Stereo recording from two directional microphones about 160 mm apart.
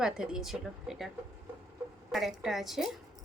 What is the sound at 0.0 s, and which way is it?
A woman's voice, 5° right (ahead or behind).